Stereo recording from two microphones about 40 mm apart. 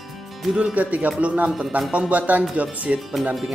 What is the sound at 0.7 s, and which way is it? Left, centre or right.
Speech, right.